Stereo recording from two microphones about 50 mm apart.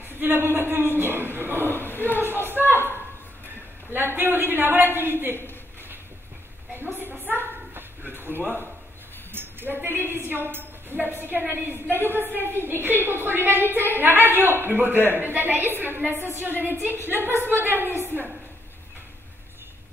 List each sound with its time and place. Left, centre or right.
0.2 s a woman's voice: right
1.7 s a man's voice: left
2.2 s a woman's voice: right
6.7 s a sound: right
9.8 s a woman's voice: right